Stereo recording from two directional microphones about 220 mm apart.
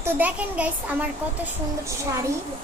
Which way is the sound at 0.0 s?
5° right (ahead or behind).